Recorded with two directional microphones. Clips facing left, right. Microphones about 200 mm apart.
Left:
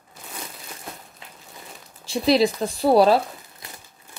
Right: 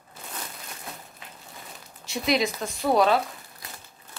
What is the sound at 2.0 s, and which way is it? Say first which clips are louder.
Speech: left 6 dB; 30° left (ahead or behind).